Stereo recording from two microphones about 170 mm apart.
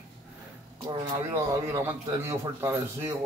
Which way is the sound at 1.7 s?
15° right (ahead or behind).